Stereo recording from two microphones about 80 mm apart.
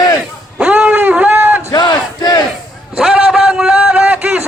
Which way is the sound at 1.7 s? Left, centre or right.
Left.